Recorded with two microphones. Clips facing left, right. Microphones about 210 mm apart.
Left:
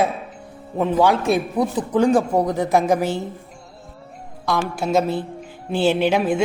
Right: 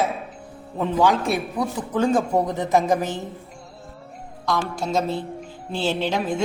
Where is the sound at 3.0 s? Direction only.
20° right (ahead or behind).